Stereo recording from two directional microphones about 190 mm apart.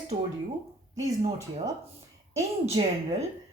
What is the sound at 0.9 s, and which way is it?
Speech, 15° right (ahead or behind).